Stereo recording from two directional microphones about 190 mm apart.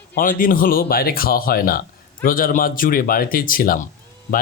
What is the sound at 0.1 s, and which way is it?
Speech, 50° left (ahead or behind).